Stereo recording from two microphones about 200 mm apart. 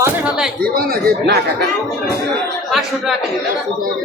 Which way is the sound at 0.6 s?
50° right (ahead or behind).